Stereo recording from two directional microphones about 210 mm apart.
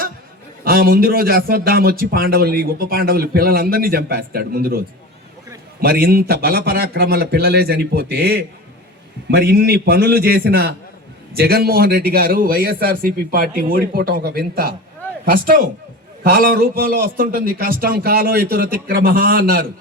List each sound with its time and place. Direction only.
0.6 s a man's voice: 45° right (ahead or behind)
5.8 s a man's voice: 45° right (ahead or behind)